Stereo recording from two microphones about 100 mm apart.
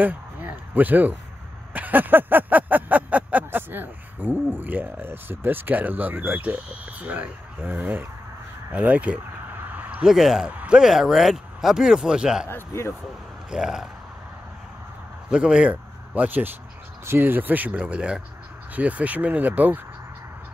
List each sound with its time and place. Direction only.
0.0 s a sound: 15° right (ahead or behind)
10.0 s speech: 5° right (ahead or behind)
12.4 s speech: 25° left (ahead or behind)
13.5 s speech: 5° right (ahead or behind)
15.2 s speech: 10° right (ahead or behind)
17.0 s a sound: 20° right (ahead or behind)